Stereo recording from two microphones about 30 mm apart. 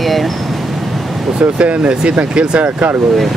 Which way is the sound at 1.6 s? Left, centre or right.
Right.